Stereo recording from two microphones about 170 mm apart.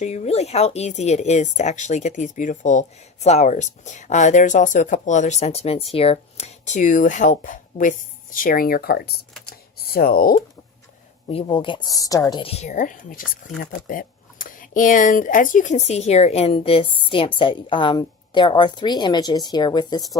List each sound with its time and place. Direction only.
0.0 s speech: 40° left (ahead or behind); by 9.2 s 70° left (ahead or behind)
9.5 s computer keyboard: 65° left (ahead or behind)
11.3 s speech: 30° left (ahead or behind)